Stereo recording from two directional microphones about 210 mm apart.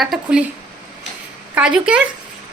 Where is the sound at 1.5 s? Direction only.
5° right (ahead or behind).